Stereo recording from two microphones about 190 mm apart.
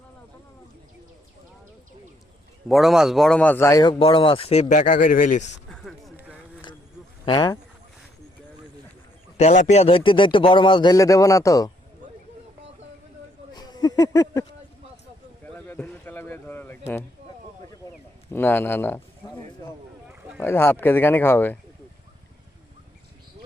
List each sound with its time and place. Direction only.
2.6 s a man's voice: centre (ahead or behind); by 5.5 s 40° left (ahead or behind)
5.6 s a sound: centre (ahead or behind)
7.3 s speech: 20° left (ahead or behind)
9.4 s a man's voice: 40° left (ahead or behind); by 11.7 s 15° left (ahead or behind)
13.5 s a sound: 20° left (ahead or behind)
15.5 s a sound: 10° left (ahead or behind)
18.3 s speech: 10° left (ahead or behind)
20.1 s boat: 10° right (ahead or behind)
20.4 s speech: 10° left (ahead or behind)